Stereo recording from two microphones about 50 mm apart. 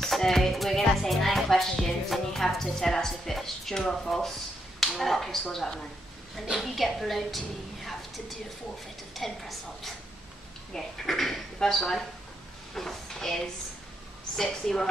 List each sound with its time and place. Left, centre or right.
0.0 s a woman's voice: centre
9.1 s a woman's voice: centre